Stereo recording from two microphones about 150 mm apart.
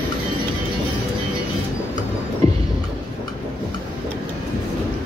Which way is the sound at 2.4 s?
45° right (ahead or behind).